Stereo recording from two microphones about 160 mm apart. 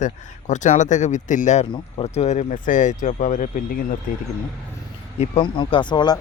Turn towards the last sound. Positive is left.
turn(degrees=30)  # may be behind; listen again after turning